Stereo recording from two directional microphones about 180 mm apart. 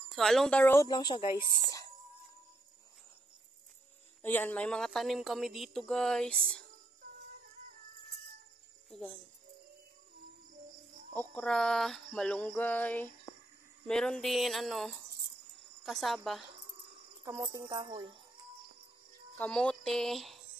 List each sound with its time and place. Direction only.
0.1 s a woman's voice: centre (ahead or behind)
0.8 s speech: 25° left (ahead or behind)
4.2 s a woman's voice: 10° left (ahead or behind)
11.1 s a sound: 5° left (ahead or behind)
13.8 s a woman's voice: 5° left (ahead or behind)
17.5 s speech: 20° right (ahead or behind)
19.3 s speech: 5° left (ahead or behind)